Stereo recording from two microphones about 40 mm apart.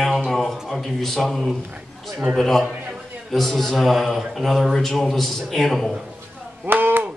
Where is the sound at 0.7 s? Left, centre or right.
Centre.